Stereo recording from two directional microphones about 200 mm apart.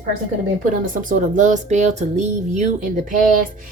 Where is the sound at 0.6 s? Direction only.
40° right (ahead or behind).